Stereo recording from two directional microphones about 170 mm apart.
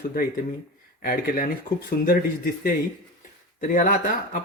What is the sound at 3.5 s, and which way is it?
Speech, 50° left (ahead or behind).